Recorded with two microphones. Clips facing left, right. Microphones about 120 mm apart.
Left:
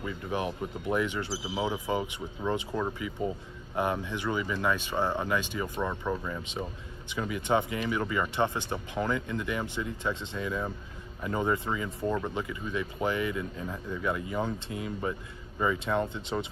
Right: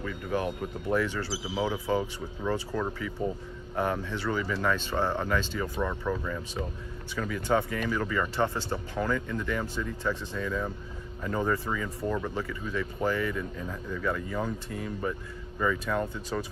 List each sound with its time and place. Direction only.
0.0 s speech: 15° left (ahead or behind)